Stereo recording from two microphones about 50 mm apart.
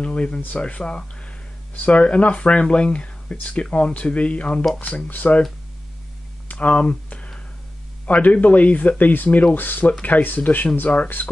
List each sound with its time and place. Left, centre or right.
0.0 s speech: centre
6.5 s a sound: left
8.1 s speech: left